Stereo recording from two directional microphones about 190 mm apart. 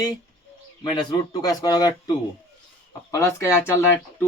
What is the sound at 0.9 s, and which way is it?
Speech, 20° left (ahead or behind).